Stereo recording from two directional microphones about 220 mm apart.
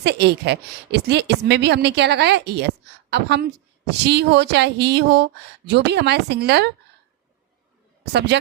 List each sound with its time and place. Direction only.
0.0 s speech: 50° right (ahead or behind)
8.3 s speech: 50° right (ahead or behind)